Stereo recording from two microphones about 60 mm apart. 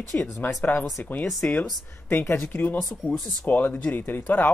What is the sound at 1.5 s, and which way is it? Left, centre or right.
Speech, left.